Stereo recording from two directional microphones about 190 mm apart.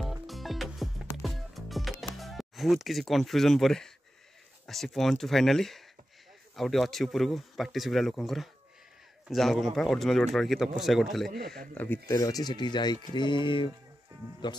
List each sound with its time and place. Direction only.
0.0 s music: centre (ahead or behind)
1.9 s a man's voice: centre (ahead or behind); by 14.6 s 25° left (ahead or behind)